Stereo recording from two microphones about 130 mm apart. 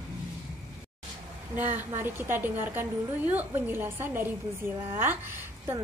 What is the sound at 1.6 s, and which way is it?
A woman's voice, 15° right (ahead or behind).